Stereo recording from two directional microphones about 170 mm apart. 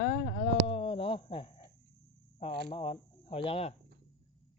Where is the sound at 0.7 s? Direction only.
35° left (ahead or behind).